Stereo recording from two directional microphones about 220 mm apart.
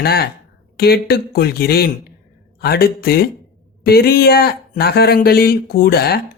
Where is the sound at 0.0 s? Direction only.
45° left (ahead or behind).